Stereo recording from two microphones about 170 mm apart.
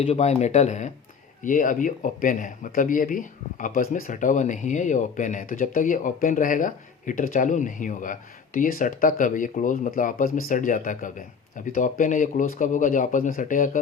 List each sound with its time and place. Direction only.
0.0 s speech: 40° left (ahead or behind)